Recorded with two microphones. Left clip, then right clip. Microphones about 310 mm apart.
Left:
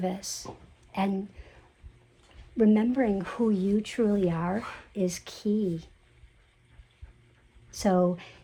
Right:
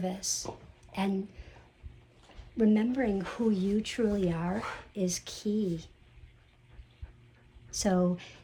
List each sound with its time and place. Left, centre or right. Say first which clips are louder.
0.0 s a woman's voice: left 1 dB; left
2.6 s speech: left 4 dB; left
7.7 s speech: left 4 dB; left